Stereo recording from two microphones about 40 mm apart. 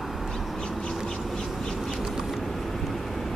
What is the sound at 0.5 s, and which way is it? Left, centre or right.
Bird, left.